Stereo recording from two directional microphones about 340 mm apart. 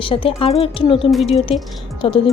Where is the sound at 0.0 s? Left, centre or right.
Centre.